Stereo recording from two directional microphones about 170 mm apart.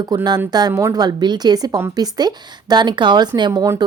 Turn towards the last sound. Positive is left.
turn(degrees=-20)  # may be behind; listen again after turning